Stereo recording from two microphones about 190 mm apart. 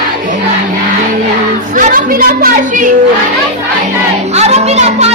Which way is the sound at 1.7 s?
45° right (ahead or behind).